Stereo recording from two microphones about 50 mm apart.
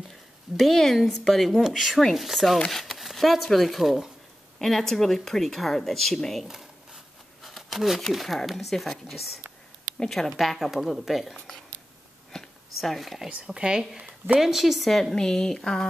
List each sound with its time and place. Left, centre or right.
0.1 s speech: centre
6.4 s a sound: centre
8.0 s speech: centre
11.3 s speech: centre
12.3 s a sound: centre
13.3 s a woman's voice: centre
14.9 s speech: centre